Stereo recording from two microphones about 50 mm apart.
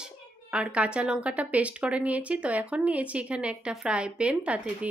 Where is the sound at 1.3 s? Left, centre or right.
Right.